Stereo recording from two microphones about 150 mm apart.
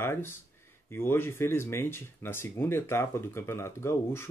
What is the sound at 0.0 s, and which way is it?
Speech, 15° left (ahead or behind).